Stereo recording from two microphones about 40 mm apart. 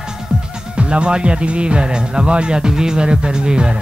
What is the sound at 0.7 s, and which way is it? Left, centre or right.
Speech, right.